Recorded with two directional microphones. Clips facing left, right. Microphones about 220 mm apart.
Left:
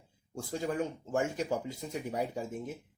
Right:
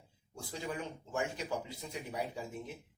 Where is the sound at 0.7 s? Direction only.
45° left (ahead or behind).